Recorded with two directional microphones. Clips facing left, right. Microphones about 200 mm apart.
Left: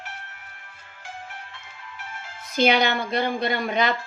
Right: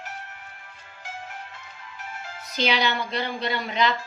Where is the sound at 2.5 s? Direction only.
50° left (ahead or behind).